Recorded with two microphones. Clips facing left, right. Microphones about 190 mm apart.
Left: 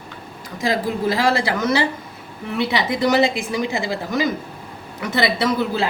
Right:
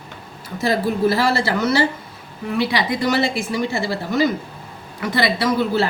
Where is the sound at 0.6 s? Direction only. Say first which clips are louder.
Right 2 dB; 15° left (ahead or behind).